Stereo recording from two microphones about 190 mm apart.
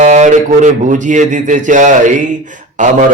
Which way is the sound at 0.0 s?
40° right (ahead or behind).